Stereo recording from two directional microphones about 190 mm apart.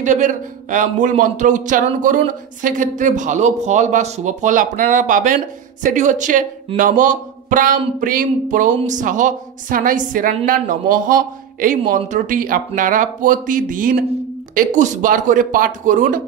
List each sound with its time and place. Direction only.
0.0 s a man's voice: 40° right (ahead or behind)